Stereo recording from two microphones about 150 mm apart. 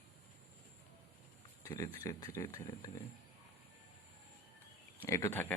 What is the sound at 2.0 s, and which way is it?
Speech, 20° left (ahead or behind).